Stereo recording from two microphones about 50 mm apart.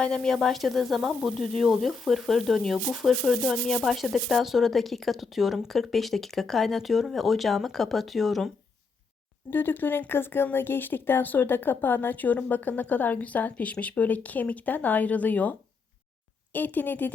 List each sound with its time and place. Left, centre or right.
0.0 s speech: centre
0.4 s speech: centre
9.5 s speech: left